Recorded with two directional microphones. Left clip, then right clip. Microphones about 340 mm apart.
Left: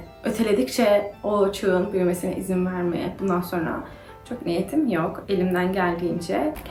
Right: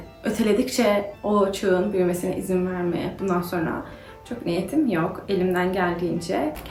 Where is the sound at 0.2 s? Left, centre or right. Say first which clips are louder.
Even; centre.